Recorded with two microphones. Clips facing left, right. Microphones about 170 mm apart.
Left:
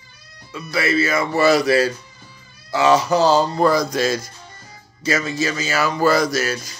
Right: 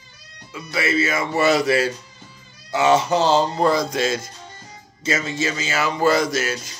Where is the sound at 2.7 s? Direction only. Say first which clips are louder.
Left 1 dB; 20° right (ahead or behind).